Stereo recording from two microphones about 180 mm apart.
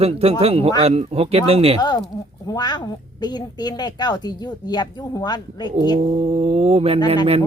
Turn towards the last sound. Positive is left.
turn(degrees=-30)  # may be behind; listen again after turning